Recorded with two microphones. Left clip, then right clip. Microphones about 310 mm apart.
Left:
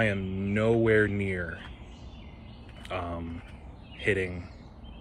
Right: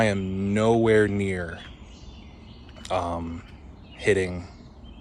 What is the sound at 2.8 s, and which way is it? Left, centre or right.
Speech, centre.